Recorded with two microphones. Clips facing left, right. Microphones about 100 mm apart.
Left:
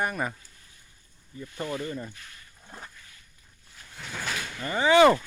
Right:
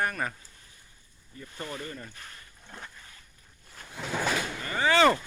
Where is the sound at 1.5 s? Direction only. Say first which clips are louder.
Left 6 dB; 25° left (ahead or behind).